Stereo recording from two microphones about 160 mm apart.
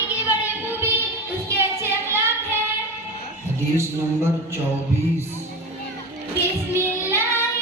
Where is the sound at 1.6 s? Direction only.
15° right (ahead or behind).